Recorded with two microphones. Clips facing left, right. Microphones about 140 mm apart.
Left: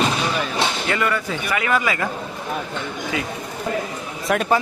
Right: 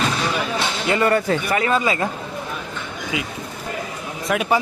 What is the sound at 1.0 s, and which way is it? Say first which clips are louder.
Speech: right 5 dB; 45° right (ahead or behind).